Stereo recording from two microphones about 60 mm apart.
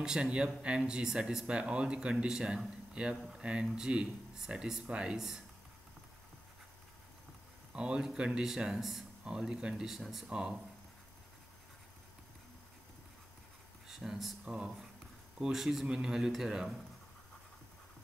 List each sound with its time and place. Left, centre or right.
0.0 s speech: centre
2.9 s a sound: centre
3.3 s speech: centre
7.7 s a man's voice: centre
13.8 s a sound: centre
14.4 s speech: centre